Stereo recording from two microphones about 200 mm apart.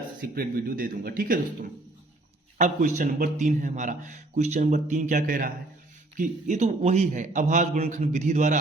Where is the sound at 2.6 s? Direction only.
40° right (ahead or behind).